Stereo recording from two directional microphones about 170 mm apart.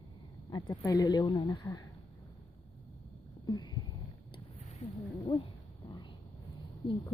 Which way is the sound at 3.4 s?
25° left (ahead or behind).